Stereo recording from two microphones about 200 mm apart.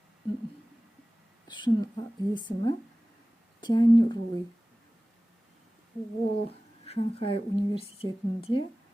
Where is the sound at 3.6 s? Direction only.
20° left (ahead or behind).